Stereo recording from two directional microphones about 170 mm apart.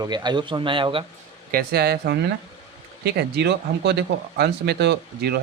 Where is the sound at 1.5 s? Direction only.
60° right (ahead or behind).